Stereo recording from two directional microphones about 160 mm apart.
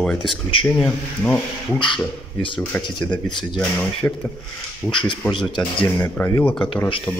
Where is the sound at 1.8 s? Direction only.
30° left (ahead or behind).